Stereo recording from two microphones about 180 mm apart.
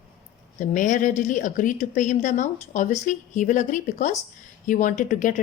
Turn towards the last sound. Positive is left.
turn(degrees=45)  # may be behind; listen again after turning